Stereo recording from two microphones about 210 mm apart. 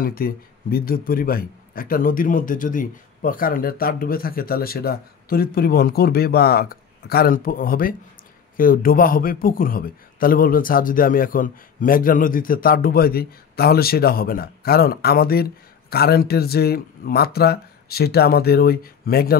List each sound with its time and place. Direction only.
0.0 s speech: 45° left (ahead or behind)